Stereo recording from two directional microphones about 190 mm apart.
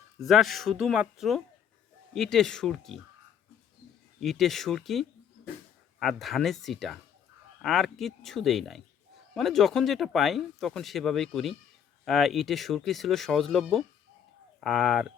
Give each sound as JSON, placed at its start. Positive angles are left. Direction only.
{"t": 0.2, "sound": "speech", "side_deg": 0}
{"t": 4.2, "sound": "speech", "side_deg": 0}